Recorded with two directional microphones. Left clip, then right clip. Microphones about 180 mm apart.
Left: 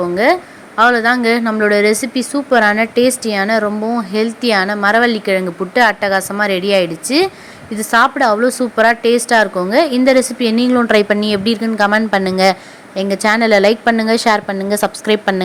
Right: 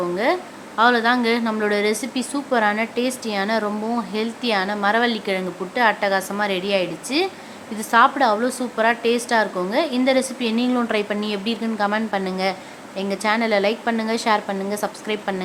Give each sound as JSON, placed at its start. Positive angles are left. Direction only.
{"t": 0.0, "sound": "a woman's voice", "side_deg": 30}